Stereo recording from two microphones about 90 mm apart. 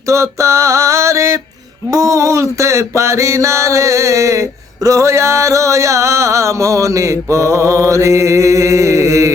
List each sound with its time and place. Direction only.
0.1 s mantra: 35° right (ahead or behind)